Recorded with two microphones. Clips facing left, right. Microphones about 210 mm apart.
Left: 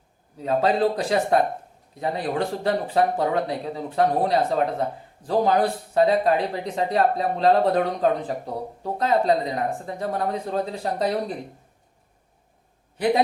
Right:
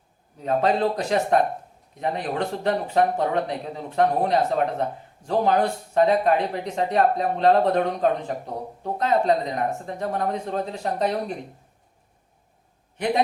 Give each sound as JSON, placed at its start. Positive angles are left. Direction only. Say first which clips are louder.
{"t": 0.3, "sound": "speech", "louder": "left 1 dB", "side_deg": 35}